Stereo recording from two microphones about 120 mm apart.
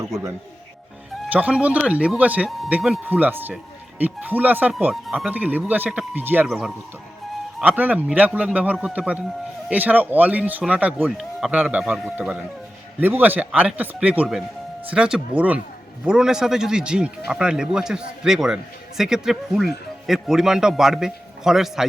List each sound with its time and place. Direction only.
0.0 s speech: 25° right (ahead or behind)
1.3 s speech: 10° right (ahead or behind)
5.0 s speech: centre (ahead or behind)
5.3 s speech: 15° right (ahead or behind)
6.5 s speech: centre (ahead or behind)
7.6 s speech: 10° right (ahead or behind)
13.0 s speech: 15° right (ahead or behind)